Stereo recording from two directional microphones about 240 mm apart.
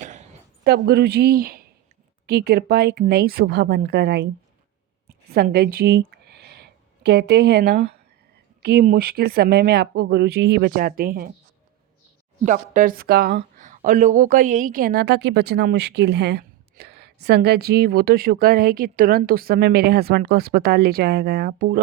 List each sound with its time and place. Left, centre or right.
0.0 s a sound: right
2.2 s speech: right
5.3 s speech: right
12.5 s speech: right